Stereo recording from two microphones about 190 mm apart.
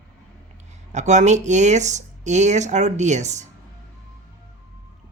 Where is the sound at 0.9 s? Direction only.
40° right (ahead or behind).